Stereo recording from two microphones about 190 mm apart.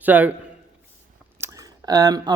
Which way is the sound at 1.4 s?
15° right (ahead or behind).